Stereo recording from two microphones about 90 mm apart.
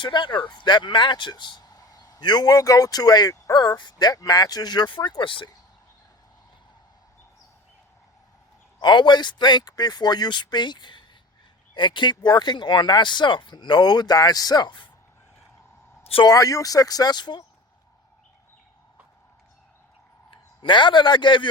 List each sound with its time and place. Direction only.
0.0 s speech: 60° left (ahead or behind)
8.8 s speech: 55° left (ahead or behind)
16.2 s speech: 40° left (ahead or behind)
20.3 s a man's voice: 65° left (ahead or behind)